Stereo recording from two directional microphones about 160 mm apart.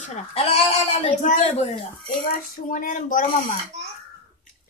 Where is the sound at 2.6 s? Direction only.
55° left (ahead or behind).